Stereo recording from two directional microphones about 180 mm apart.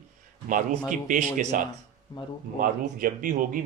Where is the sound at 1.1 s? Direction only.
45° right (ahead or behind).